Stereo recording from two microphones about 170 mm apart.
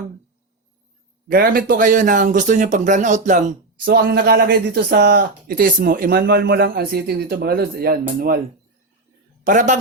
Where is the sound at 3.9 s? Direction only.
65° right (ahead or behind).